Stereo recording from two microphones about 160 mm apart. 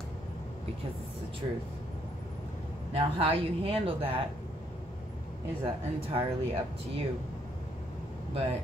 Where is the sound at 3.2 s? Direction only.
35° right (ahead or behind).